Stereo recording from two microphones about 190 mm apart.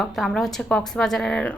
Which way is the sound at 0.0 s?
Centre (ahead or behind).